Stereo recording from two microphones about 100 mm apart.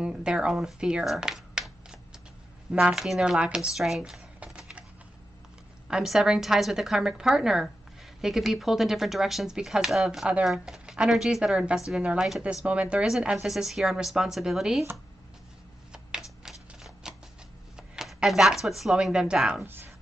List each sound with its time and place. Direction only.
0.0 s speech: 10° right (ahead or behind)
5.9 s a woman's voice: 5° right (ahead or behind)
15.9 s a sound: 5° right (ahead or behind)
17.0 s shuffling cards: 5° right (ahead or behind)
17.7 s speech: 5° right (ahead or behind)
19.6 s speech: 20° right (ahead or behind)